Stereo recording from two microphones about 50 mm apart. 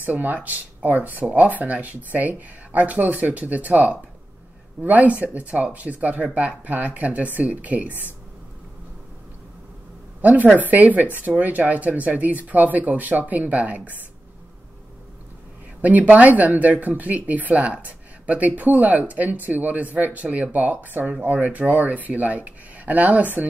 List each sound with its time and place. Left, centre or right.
0.0 s a woman's voice: right
10.2 s speech: right
15.8 s speech: right